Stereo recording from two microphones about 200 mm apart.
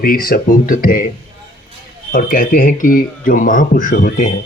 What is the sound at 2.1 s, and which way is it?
Speech, 45° left (ahead or behind).